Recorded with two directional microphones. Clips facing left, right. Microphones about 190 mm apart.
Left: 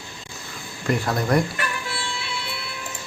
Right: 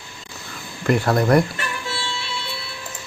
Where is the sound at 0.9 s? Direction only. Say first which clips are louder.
Right 5 dB; 55° right (ahead or behind).